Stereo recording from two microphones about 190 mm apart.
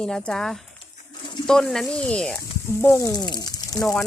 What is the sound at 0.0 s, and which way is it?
Speech, 5° left (ahead or behind).